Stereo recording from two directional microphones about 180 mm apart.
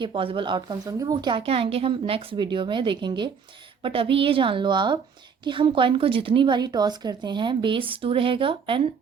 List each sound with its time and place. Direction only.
0.0 s speech: 30° right (ahead or behind)